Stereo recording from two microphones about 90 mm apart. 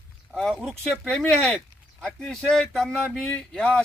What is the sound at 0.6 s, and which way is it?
Speech, 5° left (ahead or behind).